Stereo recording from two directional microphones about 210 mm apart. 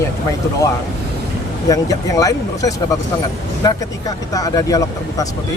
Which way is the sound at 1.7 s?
15° left (ahead or behind).